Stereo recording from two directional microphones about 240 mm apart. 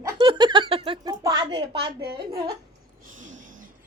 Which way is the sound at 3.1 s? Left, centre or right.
Right.